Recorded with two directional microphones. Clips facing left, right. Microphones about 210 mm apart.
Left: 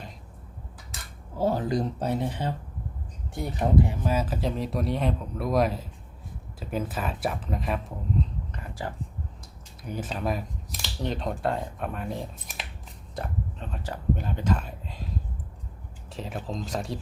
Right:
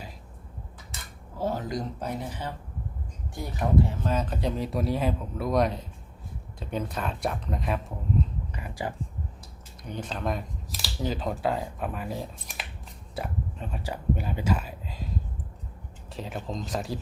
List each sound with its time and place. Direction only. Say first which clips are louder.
1.4 s speech: left 4 dB; 30° left (ahead or behind)
4.0 s speech: left 1 dB; 5° left (ahead or behind)
8.5 s speech: right 2 dB; 15° right (ahead or behind)
9.8 s speech: left 1 dB; 5° left (ahead or behind)
16.1 s speech: even; centre (ahead or behind)